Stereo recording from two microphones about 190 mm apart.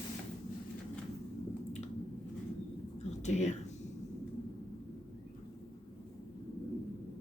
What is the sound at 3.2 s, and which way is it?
Speech, 35° left (ahead or behind).